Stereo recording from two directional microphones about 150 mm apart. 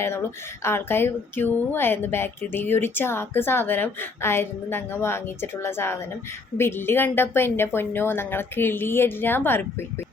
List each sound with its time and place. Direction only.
0.0 s speech: 15° left (ahead or behind)